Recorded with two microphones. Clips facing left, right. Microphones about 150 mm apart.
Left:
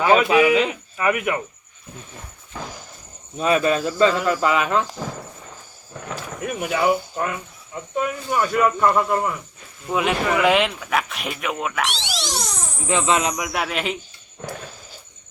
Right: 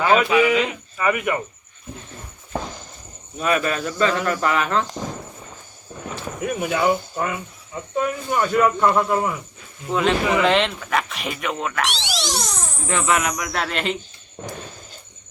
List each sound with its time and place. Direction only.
0.0 s speech: 10° left (ahead or behind)
3.3 s speech: 25° left (ahead or behind)
4.1 s speech: 5° left (ahead or behind)
6.4 s speech: centre (ahead or behind)
7.2 s speech: centre (ahead or behind)
9.9 s speech: 10° left (ahead or behind)
11.9 s speech: 90° right
12.9 s speech: 20° left (ahead or behind)
13.4 s speech: 10° left (ahead or behind)